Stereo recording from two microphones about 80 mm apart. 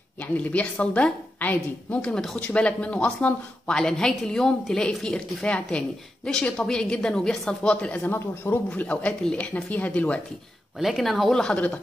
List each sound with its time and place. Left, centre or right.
0.2 s speech: centre
8.0 s a man's voice: left
8.6 s speech: centre
10.8 s speech: centre
11.5 s speech: centre